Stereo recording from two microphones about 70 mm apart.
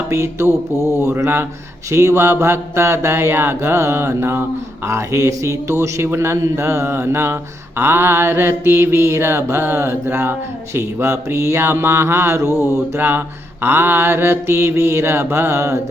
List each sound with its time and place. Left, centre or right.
0.1 s mantra: right
4.9 s mantra: right
12.5 s mantra: left
13.0 s mantra: right